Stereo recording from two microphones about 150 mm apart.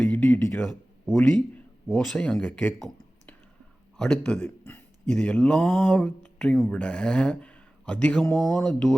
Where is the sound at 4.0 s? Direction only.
5° left (ahead or behind).